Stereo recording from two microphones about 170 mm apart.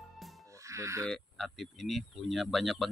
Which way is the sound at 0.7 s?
20° right (ahead or behind).